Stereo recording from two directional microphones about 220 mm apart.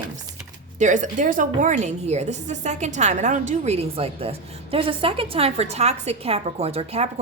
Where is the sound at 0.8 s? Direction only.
35° right (ahead or behind).